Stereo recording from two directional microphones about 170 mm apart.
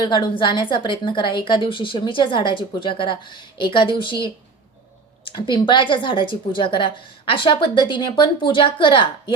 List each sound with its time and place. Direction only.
0.0 s a woman's voice: 30° left (ahead or behind)